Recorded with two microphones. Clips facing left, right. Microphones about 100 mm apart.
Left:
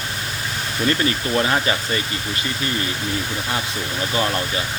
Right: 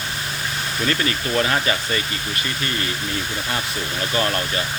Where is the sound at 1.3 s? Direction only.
15° left (ahead or behind).